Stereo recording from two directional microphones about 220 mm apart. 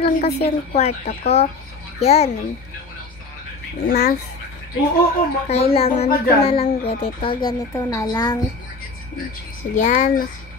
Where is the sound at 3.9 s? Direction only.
45° left (ahead or behind).